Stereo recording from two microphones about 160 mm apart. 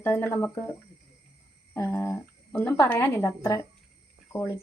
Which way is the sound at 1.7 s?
10° left (ahead or behind).